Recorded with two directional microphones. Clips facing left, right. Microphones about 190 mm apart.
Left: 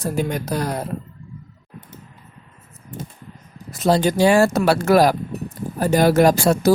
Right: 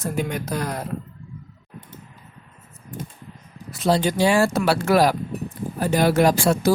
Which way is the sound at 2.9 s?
25° left (ahead or behind).